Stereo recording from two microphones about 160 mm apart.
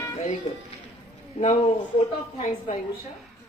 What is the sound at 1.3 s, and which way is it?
A woman's voice, 45° left (ahead or behind).